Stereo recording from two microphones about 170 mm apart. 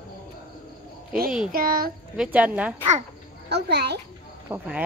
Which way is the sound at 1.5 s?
60° right (ahead or behind).